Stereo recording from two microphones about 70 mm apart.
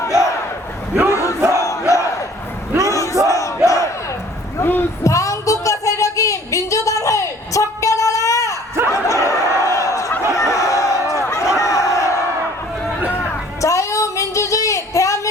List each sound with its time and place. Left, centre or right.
0.0 s battle cry: left
1.5 s crowd: left
2.8 s battle cry: left
4.6 s a sound: left
5.0 s a sound: left
11.6 s crowd: left
13.6 s child singing: left